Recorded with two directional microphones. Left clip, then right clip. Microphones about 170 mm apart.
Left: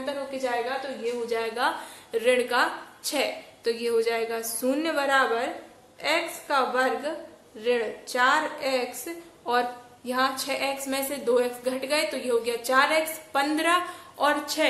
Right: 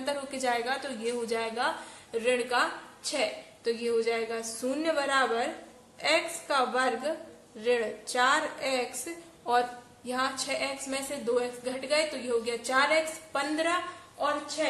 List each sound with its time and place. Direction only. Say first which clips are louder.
0.0 s a woman's voice: left 1 dB; 10° left (ahead or behind); by 13.7 s 25° left (ahead or behind)
14.1 s a woman's voice: left 6 dB; 40° left (ahead or behind)